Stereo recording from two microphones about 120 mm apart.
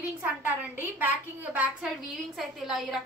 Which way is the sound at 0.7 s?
15° right (ahead or behind).